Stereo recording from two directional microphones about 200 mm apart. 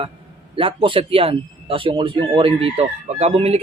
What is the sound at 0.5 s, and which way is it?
Speech, 25° right (ahead or behind).